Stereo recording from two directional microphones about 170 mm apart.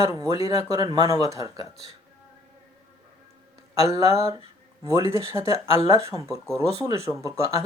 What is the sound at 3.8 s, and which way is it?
Speech, 20° right (ahead or behind).